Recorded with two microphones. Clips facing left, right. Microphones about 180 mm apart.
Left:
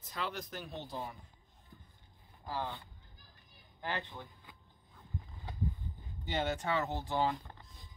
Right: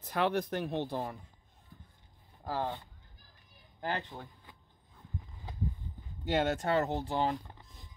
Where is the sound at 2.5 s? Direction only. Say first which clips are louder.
Right 4 dB; 45° right (ahead or behind).